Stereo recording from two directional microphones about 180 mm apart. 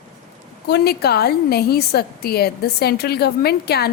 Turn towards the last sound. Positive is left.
turn(degrees=60)  # may be behind; listen again after turning